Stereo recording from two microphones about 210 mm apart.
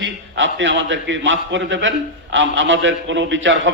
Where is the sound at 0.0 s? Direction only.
65° right (ahead or behind).